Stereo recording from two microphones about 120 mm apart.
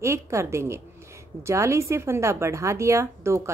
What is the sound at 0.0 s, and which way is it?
A woman's voice, 25° right (ahead or behind).